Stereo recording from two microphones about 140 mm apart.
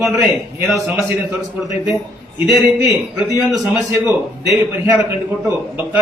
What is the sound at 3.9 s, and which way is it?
Speech, 20° right (ahead or behind).